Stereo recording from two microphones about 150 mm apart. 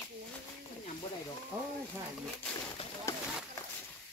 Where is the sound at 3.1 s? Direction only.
20° left (ahead or behind).